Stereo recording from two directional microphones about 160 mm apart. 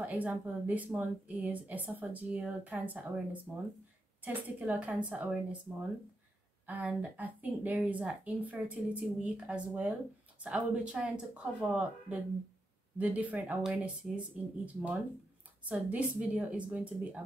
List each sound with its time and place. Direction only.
0.0 s a woman's voice: 10° right (ahead or behind)